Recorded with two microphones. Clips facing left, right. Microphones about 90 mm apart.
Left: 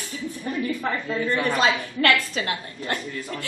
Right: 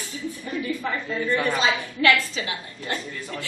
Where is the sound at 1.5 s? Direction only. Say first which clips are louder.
Left 2 dB; 50° left (ahead or behind).